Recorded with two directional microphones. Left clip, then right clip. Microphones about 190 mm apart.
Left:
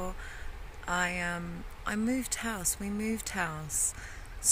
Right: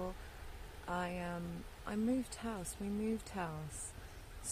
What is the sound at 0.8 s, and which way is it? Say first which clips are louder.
Speech: left 10 dB; 5° left (ahead or behind).